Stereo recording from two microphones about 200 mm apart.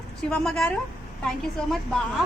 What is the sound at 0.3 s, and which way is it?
Speech, 5° left (ahead or behind).